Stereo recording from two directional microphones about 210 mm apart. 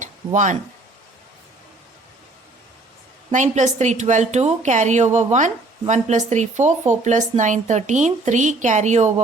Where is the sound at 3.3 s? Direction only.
35° right (ahead or behind).